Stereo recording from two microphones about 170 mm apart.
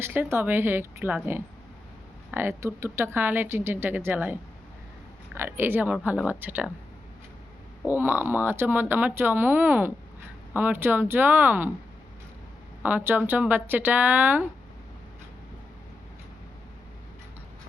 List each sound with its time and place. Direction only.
0.0 s speech: 15° right (ahead or behind)
7.9 s speech: 10° right (ahead or behind)
12.8 s speech: 10° right (ahead or behind)